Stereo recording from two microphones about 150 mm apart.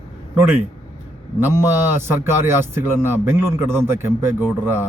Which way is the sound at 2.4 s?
15° right (ahead or behind).